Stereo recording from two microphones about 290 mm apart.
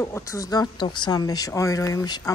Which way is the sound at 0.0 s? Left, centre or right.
Centre.